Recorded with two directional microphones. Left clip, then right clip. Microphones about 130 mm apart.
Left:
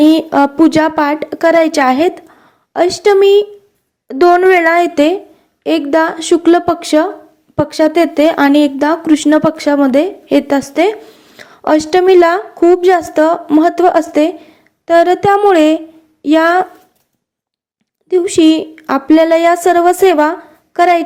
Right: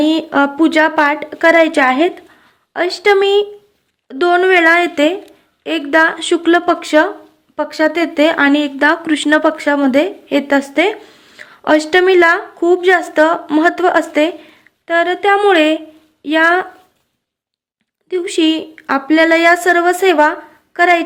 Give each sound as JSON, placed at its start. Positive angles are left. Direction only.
{"t": 0.0, "sound": "a woman's voice", "side_deg": 40}
{"t": 2.7, "sound": "a woman's voice", "side_deg": 35}
{"t": 11.0, "sound": "a sound", "side_deg": 25}
{"t": 11.6, "sound": "a woman's voice", "side_deg": 40}
{"t": 18.1, "sound": "a woman's voice", "side_deg": 40}